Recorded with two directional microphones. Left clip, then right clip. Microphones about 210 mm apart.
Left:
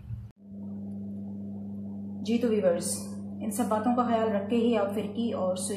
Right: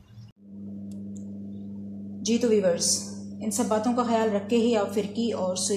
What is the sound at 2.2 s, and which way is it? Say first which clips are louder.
A woman's voice: right 3 dB; 50° right (ahead or behind).